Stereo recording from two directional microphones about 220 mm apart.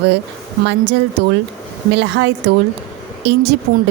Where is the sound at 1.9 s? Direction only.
55° right (ahead or behind).